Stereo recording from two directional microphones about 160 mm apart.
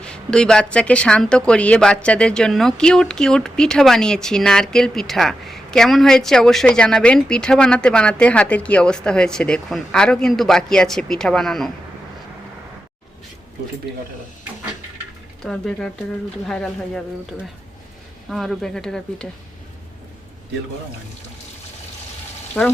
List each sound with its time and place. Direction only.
0.0 s a woman's voice: 5° left (ahead or behind)
15.4 s a woman's voice: 5° left (ahead or behind)
18.3 s a woman's voice: centre (ahead or behind)
22.6 s speech: 10° left (ahead or behind)